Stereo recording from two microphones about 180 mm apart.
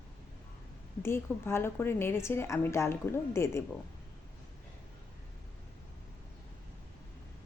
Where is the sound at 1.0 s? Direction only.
15° left (ahead or behind).